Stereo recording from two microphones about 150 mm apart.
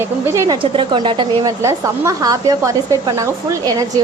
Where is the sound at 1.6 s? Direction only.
20° right (ahead or behind).